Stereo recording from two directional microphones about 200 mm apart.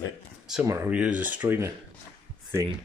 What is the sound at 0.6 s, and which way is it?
Speech, 15° right (ahead or behind).